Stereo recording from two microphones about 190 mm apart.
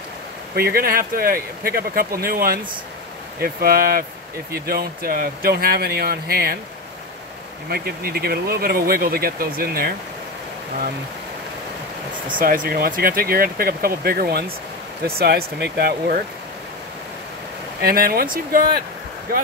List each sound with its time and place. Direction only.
0.6 s speech: 55° right (ahead or behind)
7.7 s speech: 55° right (ahead or behind)
12.3 s speech: 45° right (ahead or behind)
17.8 s speech: 50° right (ahead or behind)